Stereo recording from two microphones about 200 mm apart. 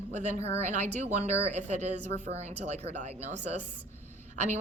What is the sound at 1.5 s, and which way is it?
Speech, 35° right (ahead or behind).